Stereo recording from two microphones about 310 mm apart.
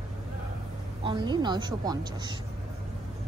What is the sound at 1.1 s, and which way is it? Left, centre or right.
Speech, centre.